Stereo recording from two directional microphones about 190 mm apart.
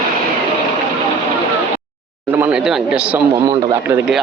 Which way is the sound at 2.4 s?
5° right (ahead or behind).